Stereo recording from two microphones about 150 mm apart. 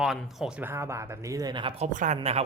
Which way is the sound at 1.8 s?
55° right (ahead or behind).